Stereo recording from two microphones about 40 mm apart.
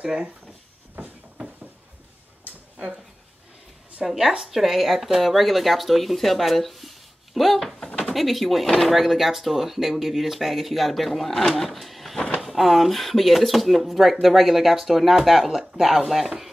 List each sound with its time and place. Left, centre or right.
0.0 s speech: right
4.0 s speech: centre